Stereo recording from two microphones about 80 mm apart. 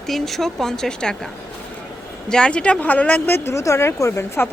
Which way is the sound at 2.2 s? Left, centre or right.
Centre.